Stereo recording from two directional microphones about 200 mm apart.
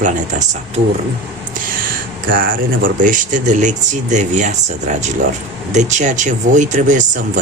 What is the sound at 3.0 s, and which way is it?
Speech, 40° right (ahead or behind).